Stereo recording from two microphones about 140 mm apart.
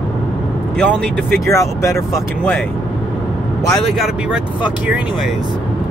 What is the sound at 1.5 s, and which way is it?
Speech, 20° left (ahead or behind).